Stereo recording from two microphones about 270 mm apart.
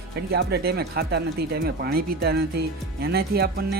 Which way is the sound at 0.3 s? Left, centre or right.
Right.